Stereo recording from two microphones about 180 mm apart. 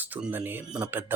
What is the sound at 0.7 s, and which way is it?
Speech, 20° right (ahead or behind).